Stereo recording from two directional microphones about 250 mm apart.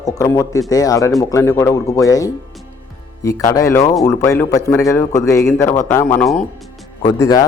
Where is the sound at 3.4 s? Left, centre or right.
Centre.